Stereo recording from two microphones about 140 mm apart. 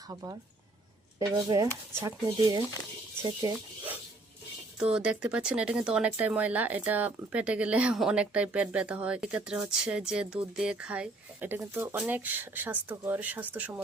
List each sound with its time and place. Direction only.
0.1 s speech: 25° right (ahead or behind)
4.8 s speech: 5° right (ahead or behind)